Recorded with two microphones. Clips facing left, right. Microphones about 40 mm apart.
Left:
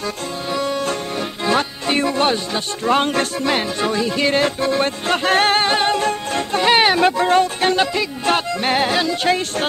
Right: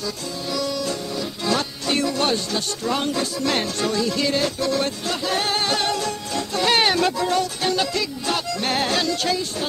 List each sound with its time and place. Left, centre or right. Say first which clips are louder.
0.5 s music: left 4 dB; left
2.8 s music: left 8 dB; left
3.4 s music: left 3 dB; left
6.6 s speech: left 4 dB; left